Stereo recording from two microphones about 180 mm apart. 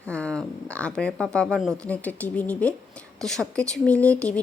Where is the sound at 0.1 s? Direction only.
5° left (ahead or behind).